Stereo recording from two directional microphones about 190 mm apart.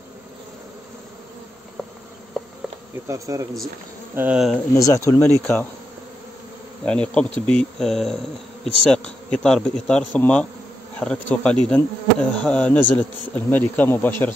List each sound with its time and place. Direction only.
2.4 s insect: centre (ahead or behind)
3.1 s speech: 15° right (ahead or behind)
4.7 s speech: 20° left (ahead or behind)
6.8 s speech: 5° left (ahead or behind)